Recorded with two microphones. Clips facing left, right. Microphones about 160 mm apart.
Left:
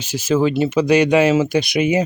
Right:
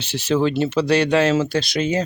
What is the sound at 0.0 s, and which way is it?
Speech, 10° left (ahead or behind).